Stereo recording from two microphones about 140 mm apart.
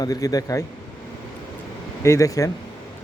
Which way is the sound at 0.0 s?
25° left (ahead or behind).